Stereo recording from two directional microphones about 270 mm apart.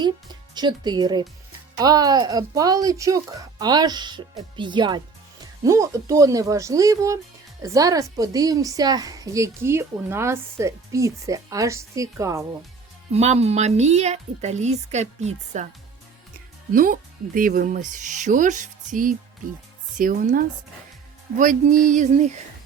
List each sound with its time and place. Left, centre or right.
0.0 s a woman's voice: centre
13.1 s speech: right
16.7 s speech: right